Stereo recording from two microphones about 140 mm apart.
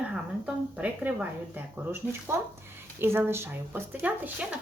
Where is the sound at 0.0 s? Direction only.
10° right (ahead or behind).